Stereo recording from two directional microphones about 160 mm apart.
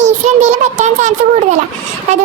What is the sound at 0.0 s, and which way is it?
A child's voice, 45° right (ahead or behind).